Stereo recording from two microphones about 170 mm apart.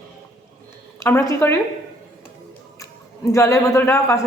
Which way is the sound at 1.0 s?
15° left (ahead or behind).